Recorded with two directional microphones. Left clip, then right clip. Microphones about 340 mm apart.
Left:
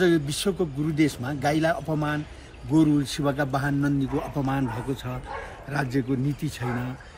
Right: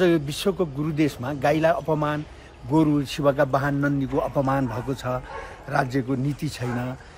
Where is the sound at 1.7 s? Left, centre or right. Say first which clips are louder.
Right 4 dB; centre.